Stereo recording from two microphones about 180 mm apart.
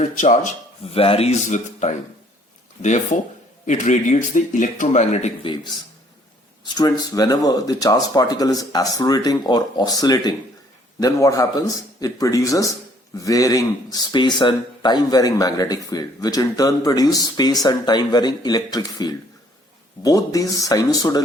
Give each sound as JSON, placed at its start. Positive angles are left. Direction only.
{"t": 0.0, "sound": "speech", "side_deg": 45}
{"t": 6.7, "sound": "speech", "side_deg": 20}